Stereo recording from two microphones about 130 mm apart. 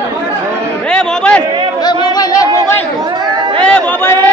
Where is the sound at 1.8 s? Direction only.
30° left (ahead or behind).